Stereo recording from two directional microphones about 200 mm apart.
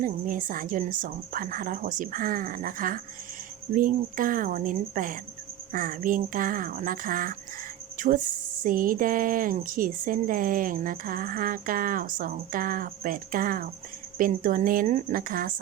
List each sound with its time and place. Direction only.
0.0 s speech: 40° right (ahead or behind)